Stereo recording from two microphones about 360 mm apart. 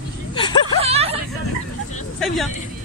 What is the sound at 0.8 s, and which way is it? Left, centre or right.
Speech, centre.